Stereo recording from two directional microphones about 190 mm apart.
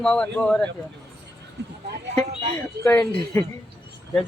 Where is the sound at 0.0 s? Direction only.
5° left (ahead or behind).